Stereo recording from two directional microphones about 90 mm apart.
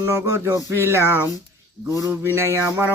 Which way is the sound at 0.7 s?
25° right (ahead or behind).